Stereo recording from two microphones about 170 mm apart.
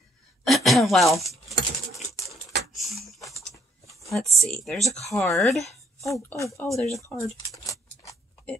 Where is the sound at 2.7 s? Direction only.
Centre (ahead or behind).